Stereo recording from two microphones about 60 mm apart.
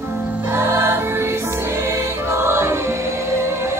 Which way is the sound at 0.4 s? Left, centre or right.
Right.